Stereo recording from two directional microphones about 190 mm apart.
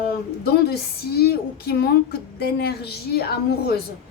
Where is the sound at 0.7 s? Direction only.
55° left (ahead or behind).